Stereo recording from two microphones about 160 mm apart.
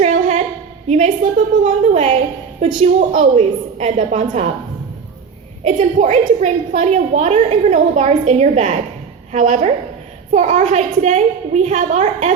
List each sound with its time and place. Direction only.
0.0 s a sound: 45° right (ahead or behind)
0.9 s a woman's voice: 50° right (ahead or behind)
5.6 s a woman's voice: 50° right (ahead or behind)